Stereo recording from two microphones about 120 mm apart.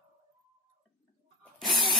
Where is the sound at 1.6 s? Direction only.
Centre (ahead or behind).